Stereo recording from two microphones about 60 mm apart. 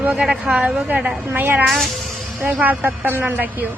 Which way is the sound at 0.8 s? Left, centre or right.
Right.